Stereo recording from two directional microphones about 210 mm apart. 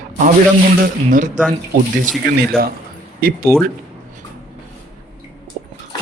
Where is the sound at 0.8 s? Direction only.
40° right (ahead or behind).